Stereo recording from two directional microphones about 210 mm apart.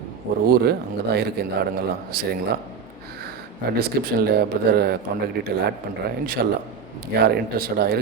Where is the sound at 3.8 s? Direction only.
45° right (ahead or behind).